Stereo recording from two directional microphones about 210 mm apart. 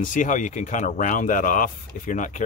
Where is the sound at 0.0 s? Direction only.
40° left (ahead or behind).